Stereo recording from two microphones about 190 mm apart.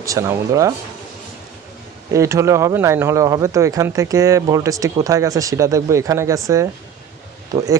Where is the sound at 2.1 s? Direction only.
15° right (ahead or behind).